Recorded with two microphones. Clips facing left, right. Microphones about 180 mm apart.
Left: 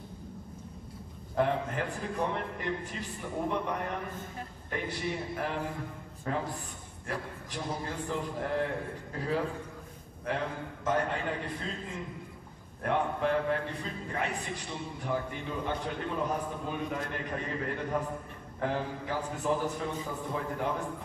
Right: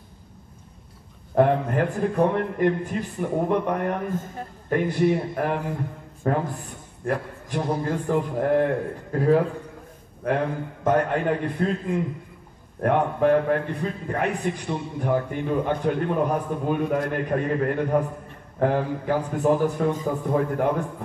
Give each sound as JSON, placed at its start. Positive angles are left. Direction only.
{"t": 1.3, "sound": "a man's voice", "side_deg": -55}